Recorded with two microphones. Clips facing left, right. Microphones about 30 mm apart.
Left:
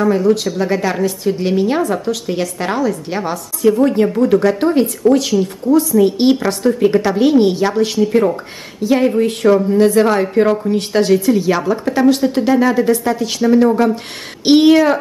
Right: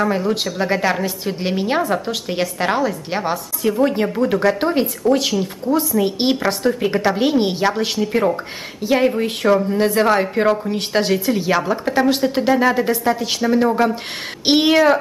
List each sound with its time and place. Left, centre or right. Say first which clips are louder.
0.0 s a woman's voice: left 5 dB; centre